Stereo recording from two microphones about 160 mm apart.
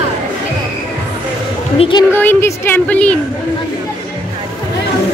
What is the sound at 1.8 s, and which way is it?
Speech, 30° left (ahead or behind).